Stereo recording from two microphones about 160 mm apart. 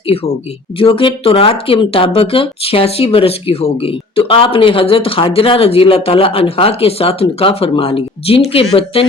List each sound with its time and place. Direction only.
0.8 s speech: 35° left (ahead or behind)